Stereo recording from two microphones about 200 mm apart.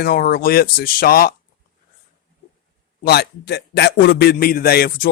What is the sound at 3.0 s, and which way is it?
Speech, 50° left (ahead or behind).